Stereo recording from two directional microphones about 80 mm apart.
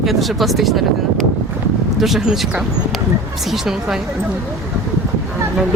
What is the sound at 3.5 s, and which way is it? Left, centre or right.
Speech, centre.